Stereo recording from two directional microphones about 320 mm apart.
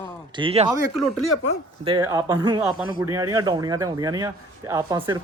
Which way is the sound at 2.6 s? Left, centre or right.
Centre.